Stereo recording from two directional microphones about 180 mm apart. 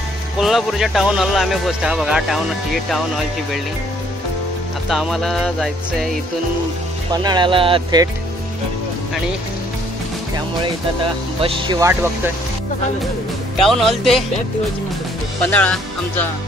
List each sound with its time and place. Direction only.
0.4 s speech: centre (ahead or behind)
4.8 s speech: 5° right (ahead or behind)
7.1 s speech: 25° right (ahead or behind)
11.4 s speech: 30° right (ahead or behind)
13.6 s speech: centre (ahead or behind)
15.5 s speech: 10° left (ahead or behind)